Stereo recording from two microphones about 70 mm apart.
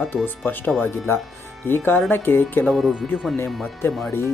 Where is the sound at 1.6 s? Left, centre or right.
Left.